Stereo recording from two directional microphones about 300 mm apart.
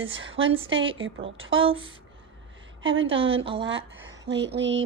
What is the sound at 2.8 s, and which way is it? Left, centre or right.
Speech, right.